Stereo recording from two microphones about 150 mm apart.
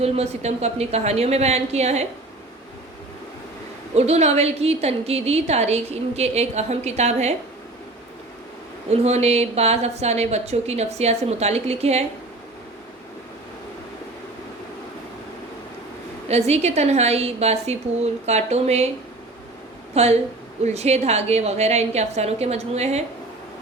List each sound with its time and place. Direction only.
0.0 s a woman's voice: 45° right (ahead or behind)
3.9 s a woman's voice: 45° right (ahead or behind)
8.9 s a woman's voice: 45° right (ahead or behind)
16.5 s a woman's voice: 45° right (ahead or behind)
19.9 s a woman's voice: 45° right (ahead or behind)